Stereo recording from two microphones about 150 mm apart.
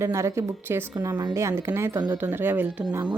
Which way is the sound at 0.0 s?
20° right (ahead or behind).